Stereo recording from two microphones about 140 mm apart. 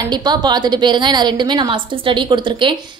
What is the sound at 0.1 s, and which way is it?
A woman's voice, 30° right (ahead or behind).